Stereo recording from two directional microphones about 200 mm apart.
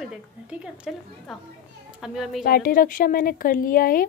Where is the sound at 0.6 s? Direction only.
5° right (ahead or behind).